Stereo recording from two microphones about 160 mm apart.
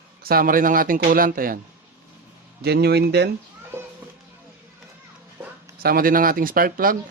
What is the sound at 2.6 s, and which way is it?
Speech, 90° right.